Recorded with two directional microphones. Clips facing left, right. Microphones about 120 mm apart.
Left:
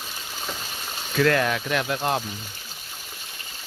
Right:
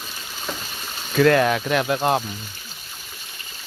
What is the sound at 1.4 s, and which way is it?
Speech, 35° right (ahead or behind).